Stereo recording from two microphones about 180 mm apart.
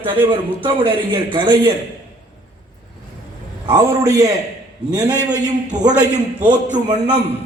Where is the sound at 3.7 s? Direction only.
20° right (ahead or behind).